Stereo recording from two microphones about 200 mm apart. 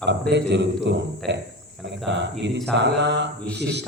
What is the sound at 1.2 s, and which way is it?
Speech, centre (ahead or behind).